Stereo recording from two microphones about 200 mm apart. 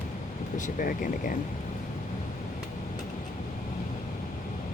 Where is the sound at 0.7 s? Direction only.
45° left (ahead or behind).